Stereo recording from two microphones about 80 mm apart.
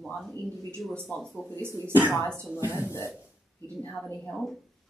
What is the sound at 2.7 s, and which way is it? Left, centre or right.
Speech, left.